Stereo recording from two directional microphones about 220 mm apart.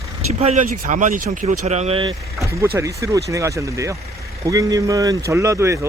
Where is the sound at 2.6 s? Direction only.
15° right (ahead or behind).